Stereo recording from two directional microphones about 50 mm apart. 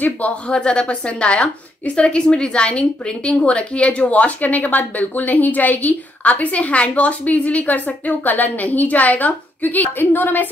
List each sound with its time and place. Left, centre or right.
0.0 s a woman's voice: left
0.5 s a woman's voice: centre; by 10.5 s left